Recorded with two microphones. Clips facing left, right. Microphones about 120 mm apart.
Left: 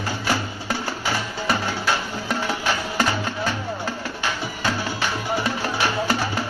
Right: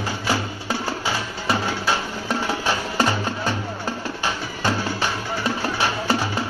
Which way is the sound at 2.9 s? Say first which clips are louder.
Right 1 dB; 25° right (ahead or behind).